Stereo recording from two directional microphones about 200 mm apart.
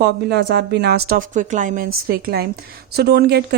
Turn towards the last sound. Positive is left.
turn(degrees=-55)  # may be behind; listen again after turning